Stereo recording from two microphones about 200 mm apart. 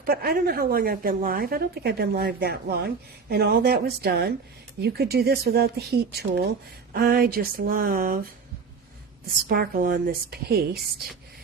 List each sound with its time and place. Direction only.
0.0 s speech: 50° right (ahead or behind)
9.5 s speech: 45° right (ahead or behind)